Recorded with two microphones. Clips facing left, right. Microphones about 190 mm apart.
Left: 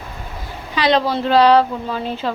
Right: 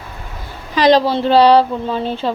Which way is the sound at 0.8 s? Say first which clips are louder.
Right 5 dB; 35° right (ahead or behind).